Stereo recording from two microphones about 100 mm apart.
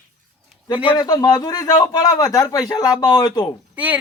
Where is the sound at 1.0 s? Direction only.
40° left (ahead or behind).